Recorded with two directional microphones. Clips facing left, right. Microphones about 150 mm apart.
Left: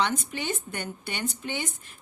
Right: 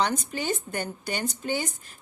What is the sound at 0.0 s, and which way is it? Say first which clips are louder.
A woman's voice: right 1 dB; 40° right (ahead or behind).